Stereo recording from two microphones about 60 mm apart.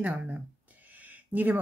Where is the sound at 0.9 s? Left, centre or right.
Right.